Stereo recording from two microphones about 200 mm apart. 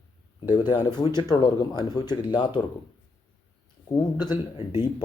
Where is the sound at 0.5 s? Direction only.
20° left (ahead or behind).